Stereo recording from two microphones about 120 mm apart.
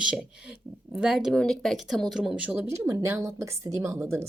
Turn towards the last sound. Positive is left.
turn(degrees=-20)  # may be behind; listen again after turning